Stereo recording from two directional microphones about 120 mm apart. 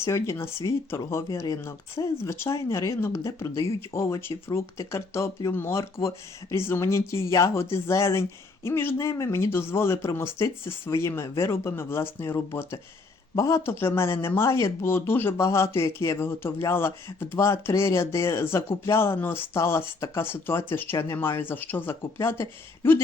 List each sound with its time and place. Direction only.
0.0 s speech: 25° left (ahead or behind)